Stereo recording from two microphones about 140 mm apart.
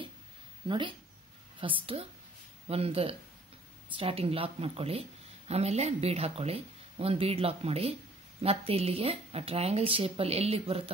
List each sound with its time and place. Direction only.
0.7 s a woman's voice: 35° right (ahead or behind)